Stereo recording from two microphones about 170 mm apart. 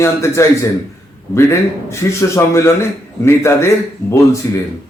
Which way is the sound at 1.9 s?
15° left (ahead or behind).